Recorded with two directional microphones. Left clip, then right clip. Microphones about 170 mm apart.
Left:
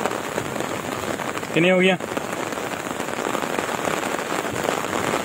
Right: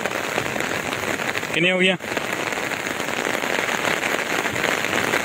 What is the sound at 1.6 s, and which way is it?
Speech, 5° right (ahead or behind).